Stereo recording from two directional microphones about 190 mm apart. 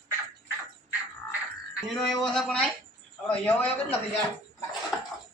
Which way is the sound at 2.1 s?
Centre (ahead or behind).